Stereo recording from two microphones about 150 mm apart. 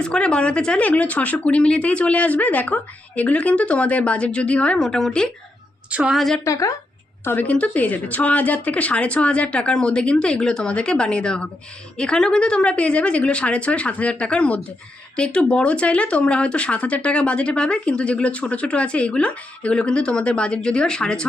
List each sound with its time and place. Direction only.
0.0 s a woman's voice: 5° left (ahead or behind)
6.4 s a woman's voice: 20° left (ahead or behind)
7.3 s speech: 10° left (ahead or behind)